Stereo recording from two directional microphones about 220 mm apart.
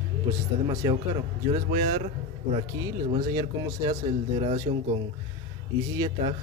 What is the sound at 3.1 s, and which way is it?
Speech, 20° right (ahead or behind).